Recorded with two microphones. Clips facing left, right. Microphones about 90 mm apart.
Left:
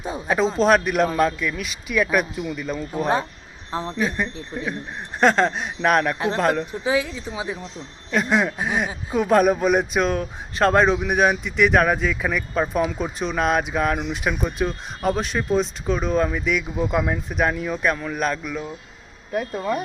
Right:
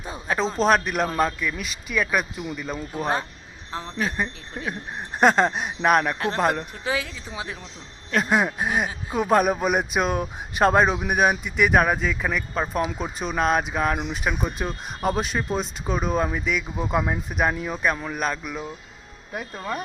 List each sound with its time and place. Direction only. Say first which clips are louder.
0.3 s speech: left 3 dB; 5° left (ahead or behind)
3.7 s speech: left 6 dB; 25° left (ahead or behind)
3.9 s speech: even; centre (ahead or behind)